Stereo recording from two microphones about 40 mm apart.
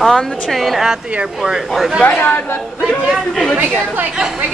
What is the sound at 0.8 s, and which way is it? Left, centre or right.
Speech, centre.